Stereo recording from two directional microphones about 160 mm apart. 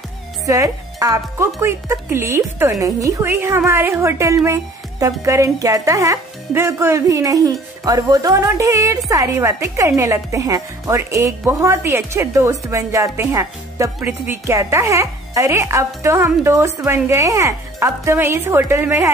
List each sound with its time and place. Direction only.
0.5 s a woman's voice: 20° right (ahead or behind)